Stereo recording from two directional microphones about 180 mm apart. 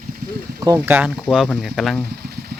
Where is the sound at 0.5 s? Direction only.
15° right (ahead or behind).